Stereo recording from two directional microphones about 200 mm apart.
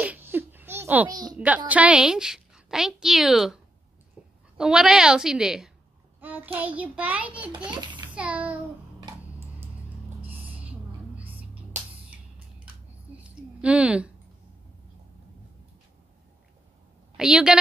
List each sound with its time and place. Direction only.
0.0 s a sound: 10° right (ahead or behind)
1.3 s a woman's voice: 5° right (ahead or behind)
4.6 s a woman's voice: 5° right (ahead or behind)
7.7 s a child's voice: 25° right (ahead or behind)
8.1 s a child's voice: 5° right (ahead or behind)
10.2 s music: 10° right (ahead or behind)
13.6 s speech: 5° right (ahead or behind)
17.2 s a woman's voice: 5° right (ahead or behind)